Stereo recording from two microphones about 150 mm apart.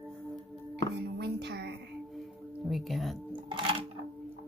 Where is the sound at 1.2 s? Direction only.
90° right.